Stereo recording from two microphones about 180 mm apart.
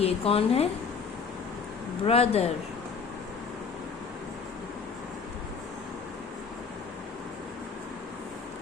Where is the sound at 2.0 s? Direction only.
35° left (ahead or behind).